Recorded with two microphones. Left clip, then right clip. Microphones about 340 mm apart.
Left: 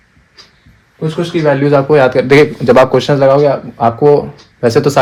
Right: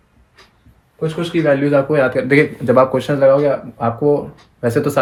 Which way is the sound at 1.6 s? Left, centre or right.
Centre.